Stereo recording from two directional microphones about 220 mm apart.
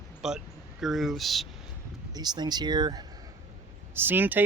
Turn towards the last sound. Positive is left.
turn(degrees=-10)  # may be behind; listen again after turning